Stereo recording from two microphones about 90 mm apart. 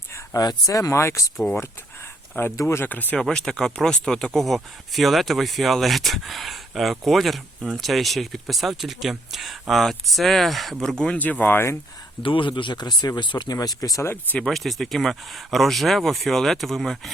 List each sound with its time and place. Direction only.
0.3 s speech: 45° left (ahead or behind)
2.6 s speech: 30° left (ahead or behind)
3.2 s speech: 5° left (ahead or behind)
11.0 s speech: 15° left (ahead or behind)
12.2 s speech: 70° left (ahead or behind); by 14.1 s 40° left (ahead or behind)
14.3 s speech: 5° left (ahead or behind)